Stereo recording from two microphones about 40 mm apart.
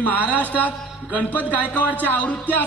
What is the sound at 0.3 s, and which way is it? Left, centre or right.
A man's voice, left.